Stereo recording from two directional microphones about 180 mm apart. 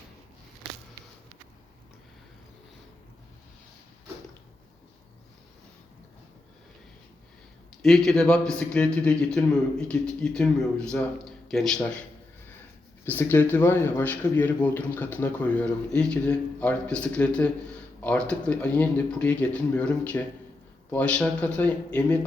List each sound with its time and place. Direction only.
7.8 s a man's voice: centre (ahead or behind)
13.1 s speech: 10° left (ahead or behind)